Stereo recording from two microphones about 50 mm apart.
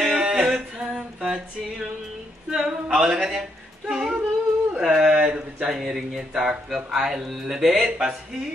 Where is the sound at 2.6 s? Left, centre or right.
Centre.